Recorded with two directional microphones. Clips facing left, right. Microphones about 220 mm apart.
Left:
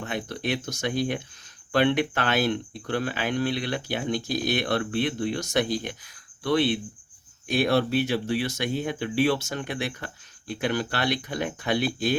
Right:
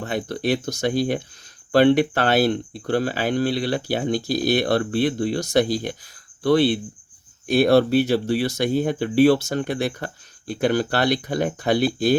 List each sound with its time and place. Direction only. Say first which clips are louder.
0.0 s speech: right 6 dB; 35° right (ahead or behind)